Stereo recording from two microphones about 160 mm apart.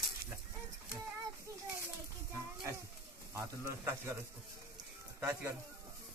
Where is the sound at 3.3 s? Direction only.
15° right (ahead or behind).